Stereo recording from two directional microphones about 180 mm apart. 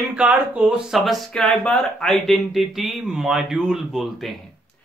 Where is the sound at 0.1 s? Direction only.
5° right (ahead or behind).